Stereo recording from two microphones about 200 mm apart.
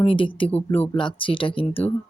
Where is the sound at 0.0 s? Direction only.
25° left (ahead or behind).